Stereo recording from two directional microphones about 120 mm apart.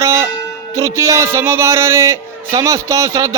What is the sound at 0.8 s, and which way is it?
Speech, 25° right (ahead or behind).